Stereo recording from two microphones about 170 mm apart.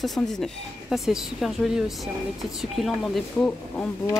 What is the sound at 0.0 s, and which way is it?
Speech, centre (ahead or behind).